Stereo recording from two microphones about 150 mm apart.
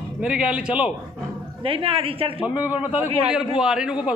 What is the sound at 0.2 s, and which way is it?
Speech, 5° right (ahead or behind).